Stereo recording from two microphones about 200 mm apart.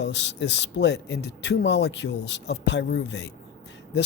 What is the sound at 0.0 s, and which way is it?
Speech, 65° left (ahead or behind).